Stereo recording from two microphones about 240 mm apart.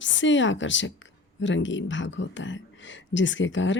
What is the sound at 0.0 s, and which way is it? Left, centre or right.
Speech, left.